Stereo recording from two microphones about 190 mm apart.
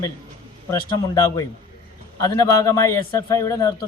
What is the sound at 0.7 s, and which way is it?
A man's voice, 20° left (ahead or behind).